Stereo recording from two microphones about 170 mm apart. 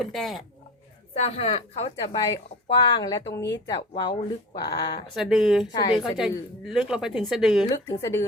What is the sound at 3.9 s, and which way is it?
Speech, 30° left (ahead or behind).